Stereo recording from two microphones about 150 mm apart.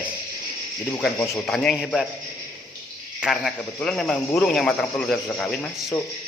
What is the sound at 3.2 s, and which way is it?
Speech, 5° right (ahead or behind).